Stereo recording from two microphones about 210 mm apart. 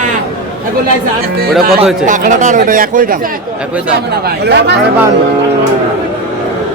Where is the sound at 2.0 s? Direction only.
35° right (ahead or behind).